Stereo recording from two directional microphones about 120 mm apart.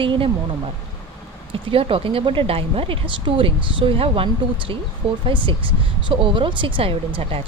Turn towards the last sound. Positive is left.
turn(degrees=-50)  # may be behind; listen again after turning